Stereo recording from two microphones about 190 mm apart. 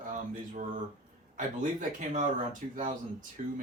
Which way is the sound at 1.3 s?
45° right (ahead or behind).